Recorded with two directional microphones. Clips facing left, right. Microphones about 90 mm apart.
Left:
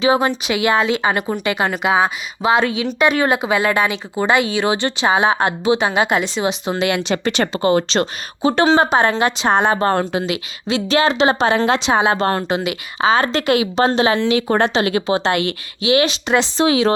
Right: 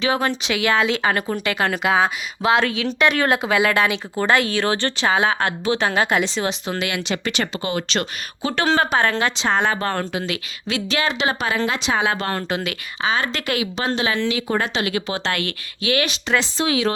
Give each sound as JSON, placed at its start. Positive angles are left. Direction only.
{"t": 0.0, "sound": "a woman's voice", "side_deg": 20}
{"t": 9.6, "sound": "a woman's voice", "side_deg": 30}
{"t": 13.0, "sound": "a woman's voice", "side_deg": 35}
{"t": 14.3, "sound": "speech", "side_deg": 50}
{"t": 14.6, "sound": "a woman's voice", "side_deg": 35}